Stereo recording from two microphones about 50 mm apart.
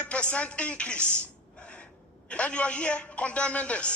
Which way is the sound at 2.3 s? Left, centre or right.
Left.